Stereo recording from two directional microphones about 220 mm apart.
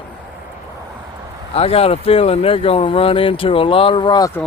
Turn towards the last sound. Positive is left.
turn(degrees=15)  # may be behind; listen again after turning